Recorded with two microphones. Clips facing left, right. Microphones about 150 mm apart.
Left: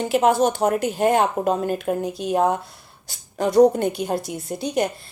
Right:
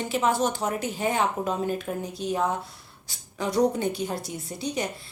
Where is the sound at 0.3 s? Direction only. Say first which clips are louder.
Left 7 dB; 65° left (ahead or behind).